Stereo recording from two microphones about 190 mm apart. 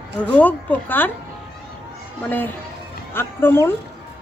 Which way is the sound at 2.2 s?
10° left (ahead or behind).